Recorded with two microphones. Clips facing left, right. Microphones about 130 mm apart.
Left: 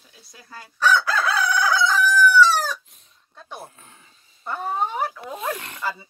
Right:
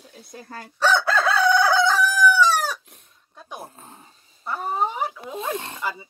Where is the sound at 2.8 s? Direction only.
65° right (ahead or behind).